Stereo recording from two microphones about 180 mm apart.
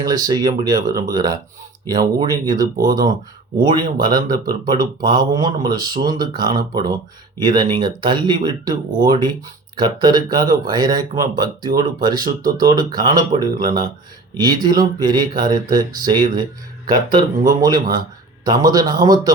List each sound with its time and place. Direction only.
0.0 s speech: 20° right (ahead or behind)
2.7 s speech: 55° right (ahead or behind)
3.6 s speech: 25° right (ahead or behind)